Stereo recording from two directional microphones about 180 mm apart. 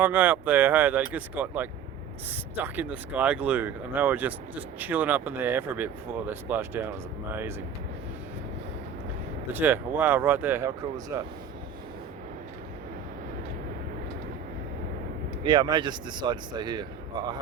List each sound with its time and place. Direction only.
0.0 s speech: 10° right (ahead or behind)
9.5 s speech: 10° right (ahead or behind)
15.4 s speech: 25° right (ahead or behind)